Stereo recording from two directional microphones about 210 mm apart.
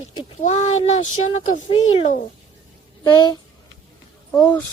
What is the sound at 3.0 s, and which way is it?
Speech, 20° left (ahead or behind).